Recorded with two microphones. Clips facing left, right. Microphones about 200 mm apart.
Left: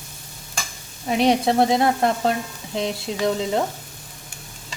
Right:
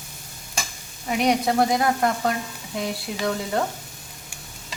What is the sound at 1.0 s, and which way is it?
Frying, 30° left (ahead or behind).